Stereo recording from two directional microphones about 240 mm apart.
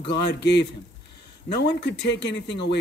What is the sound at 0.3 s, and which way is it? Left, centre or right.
Speech, left.